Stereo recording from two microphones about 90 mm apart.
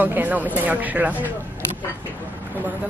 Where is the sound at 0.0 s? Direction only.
20° right (ahead or behind).